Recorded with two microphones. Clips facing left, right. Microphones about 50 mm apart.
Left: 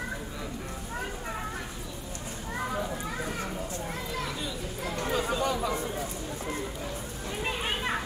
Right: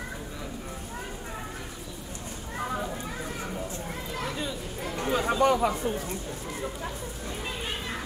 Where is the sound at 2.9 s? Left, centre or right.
Centre.